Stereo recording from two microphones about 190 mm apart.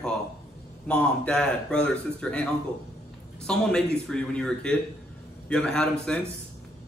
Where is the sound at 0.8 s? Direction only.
5° left (ahead or behind).